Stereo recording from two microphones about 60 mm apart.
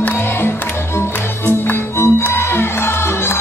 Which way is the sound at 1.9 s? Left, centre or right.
Left.